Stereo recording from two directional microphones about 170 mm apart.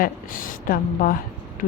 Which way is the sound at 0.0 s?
55° left (ahead or behind).